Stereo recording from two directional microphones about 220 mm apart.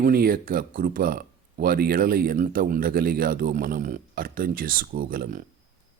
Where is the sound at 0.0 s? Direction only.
40° right (ahead or behind).